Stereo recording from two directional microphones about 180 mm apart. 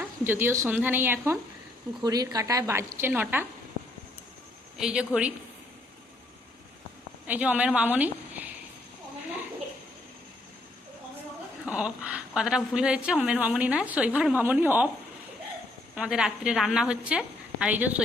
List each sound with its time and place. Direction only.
0.0 s a woman's voice: 10° right (ahead or behind)
4.8 s a woman's voice: 5° right (ahead or behind)
7.3 s a woman's voice: 10° right (ahead or behind)
11.6 s a woman's voice: 5° right (ahead or behind)
16.0 s a woman's voice: 5° right (ahead or behind)